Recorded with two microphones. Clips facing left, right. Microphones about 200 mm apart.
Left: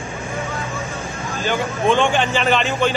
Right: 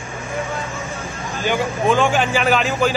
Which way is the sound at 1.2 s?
15° right (ahead or behind).